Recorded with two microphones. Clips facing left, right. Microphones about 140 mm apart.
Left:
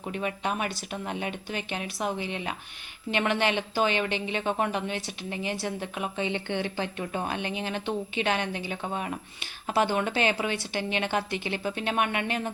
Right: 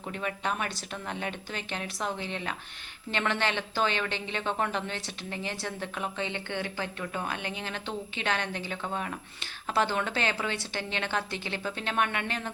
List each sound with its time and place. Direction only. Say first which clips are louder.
0.1 s speech: left 2 dB; 15° left (ahead or behind)